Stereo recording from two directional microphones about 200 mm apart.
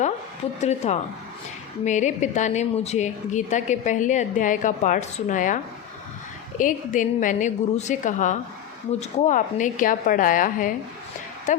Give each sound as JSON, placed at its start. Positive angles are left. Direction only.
{"t": 0.6, "sound": "a woman's voice", "side_deg": 35}
{"t": 6.6, "sound": "a woman's voice", "side_deg": 40}
{"t": 11.5, "sound": "a sound", "side_deg": 40}